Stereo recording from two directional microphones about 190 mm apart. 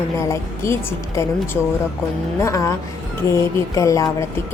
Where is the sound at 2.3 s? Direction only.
15° left (ahead or behind).